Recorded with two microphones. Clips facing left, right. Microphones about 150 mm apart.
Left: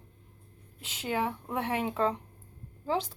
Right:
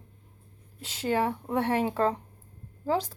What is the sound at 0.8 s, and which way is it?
A woman's voice, 35° right (ahead or behind).